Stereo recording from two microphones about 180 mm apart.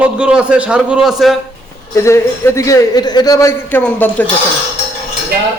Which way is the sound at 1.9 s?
15° left (ahead or behind).